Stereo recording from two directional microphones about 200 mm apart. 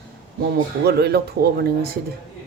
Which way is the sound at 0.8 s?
55° right (ahead or behind).